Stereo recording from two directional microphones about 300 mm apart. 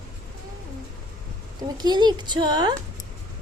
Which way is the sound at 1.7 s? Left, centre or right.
Centre.